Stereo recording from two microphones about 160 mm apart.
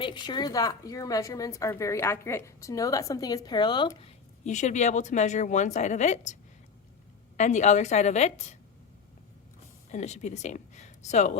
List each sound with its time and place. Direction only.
0.0 s a woman's voice: 30° left (ahead or behind)
4.0 s a woman's voice: 50° left (ahead or behind)
7.3 s a woman's voice: 45° left (ahead or behind)
9.9 s speech: 45° left (ahead or behind)